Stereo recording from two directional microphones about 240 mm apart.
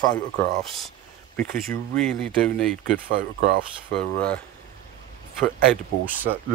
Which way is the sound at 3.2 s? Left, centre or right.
Right.